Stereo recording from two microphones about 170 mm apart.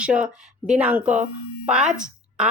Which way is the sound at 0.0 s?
5° right (ahead or behind).